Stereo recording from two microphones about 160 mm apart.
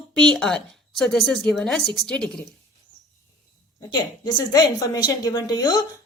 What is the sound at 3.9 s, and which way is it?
A woman's voice, 30° left (ahead or behind).